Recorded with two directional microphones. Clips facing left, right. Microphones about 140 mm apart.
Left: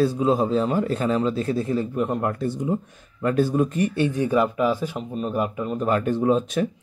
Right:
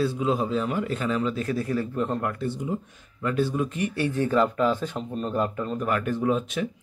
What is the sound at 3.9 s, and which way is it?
Speech, 20° left (ahead or behind).